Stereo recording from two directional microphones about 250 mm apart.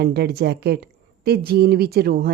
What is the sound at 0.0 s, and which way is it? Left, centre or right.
A woman's voice, right.